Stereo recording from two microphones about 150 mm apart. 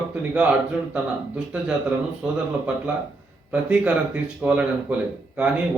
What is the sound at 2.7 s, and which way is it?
A man's voice, 5° right (ahead or behind).